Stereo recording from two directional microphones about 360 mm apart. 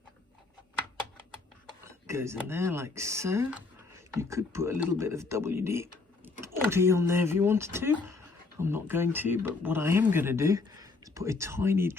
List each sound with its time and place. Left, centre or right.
1.8 s speech: centre